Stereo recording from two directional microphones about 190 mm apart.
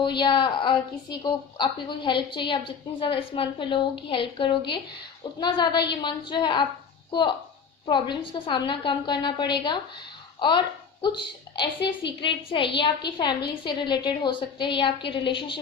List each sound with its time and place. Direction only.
0.0 s a woman's voice: 25° left (ahead or behind)